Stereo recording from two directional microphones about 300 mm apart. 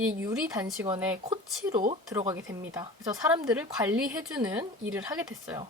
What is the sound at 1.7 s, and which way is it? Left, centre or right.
A woman's voice, centre.